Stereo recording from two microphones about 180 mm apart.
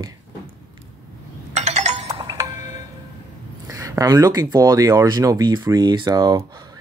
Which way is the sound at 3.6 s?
20° right (ahead or behind).